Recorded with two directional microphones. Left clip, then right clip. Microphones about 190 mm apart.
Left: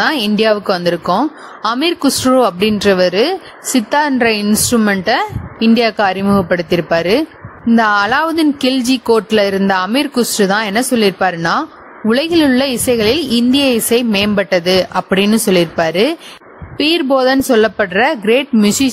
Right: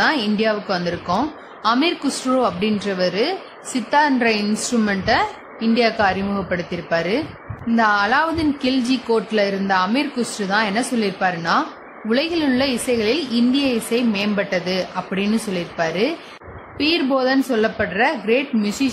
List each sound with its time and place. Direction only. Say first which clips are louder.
0.0 s a woman's voice: left 5 dB; 55° left (ahead or behind)